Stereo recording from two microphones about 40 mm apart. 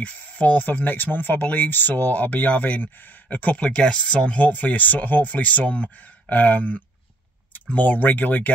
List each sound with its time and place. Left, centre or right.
0.0 s speech: left
3.5 s speech: left
4.4 s speech: left